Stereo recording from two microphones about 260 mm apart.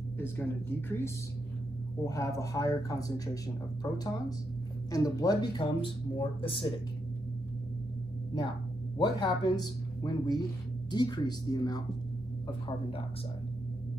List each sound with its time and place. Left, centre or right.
0.2 s speech: centre
4.9 s speech: centre
8.9 s speech: centre